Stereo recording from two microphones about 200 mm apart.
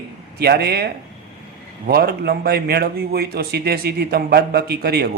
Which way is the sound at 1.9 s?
50° right (ahead or behind).